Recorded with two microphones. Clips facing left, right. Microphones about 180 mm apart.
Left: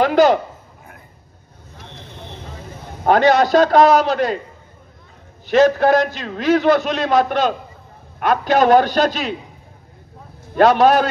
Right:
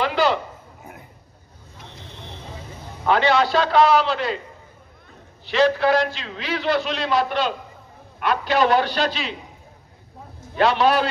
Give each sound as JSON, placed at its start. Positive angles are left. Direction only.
{"t": 0.0, "sound": "a sound", "side_deg": 45}
{"t": 3.0, "sound": "a man's voice", "side_deg": 45}
{"t": 5.5, "sound": "a man's voice", "side_deg": 45}
{"t": 10.5, "sound": "a man's voice", "side_deg": 45}